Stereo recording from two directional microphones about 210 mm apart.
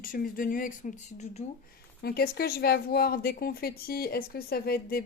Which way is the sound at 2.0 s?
50° left (ahead or behind).